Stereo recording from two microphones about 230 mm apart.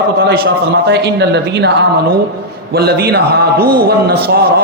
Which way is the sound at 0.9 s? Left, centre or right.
Right.